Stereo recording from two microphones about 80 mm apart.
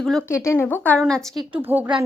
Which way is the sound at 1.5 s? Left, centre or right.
Right.